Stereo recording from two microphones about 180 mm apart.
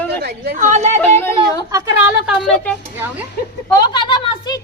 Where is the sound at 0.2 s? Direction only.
60° right (ahead or behind).